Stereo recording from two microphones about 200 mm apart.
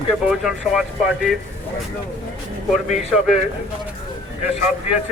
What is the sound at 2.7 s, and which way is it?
Speech, centre (ahead or behind).